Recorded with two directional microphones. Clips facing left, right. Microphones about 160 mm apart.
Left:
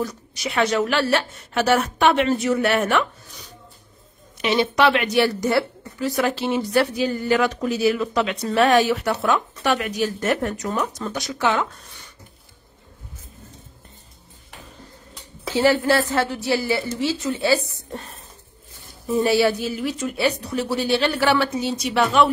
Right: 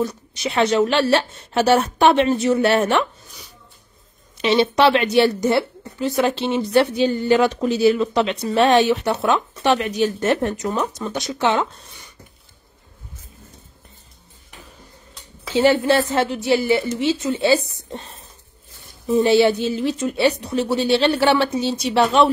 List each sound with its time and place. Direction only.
0.0 s a woman's voice: 25° right (ahead or behind)
4.4 s a woman's voice: 30° right (ahead or behind)
15.5 s a woman's voice: 20° right (ahead or behind)
19.0 s a woman's voice: 20° right (ahead or behind)